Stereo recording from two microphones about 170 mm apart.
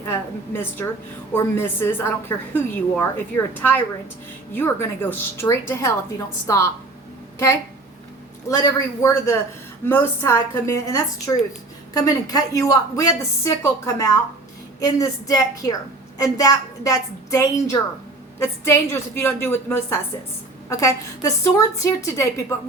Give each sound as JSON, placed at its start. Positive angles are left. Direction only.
{"t": 0.1, "sound": "a woman's voice", "side_deg": 15}
{"t": 8.4, "sound": "a woman's voice", "side_deg": 20}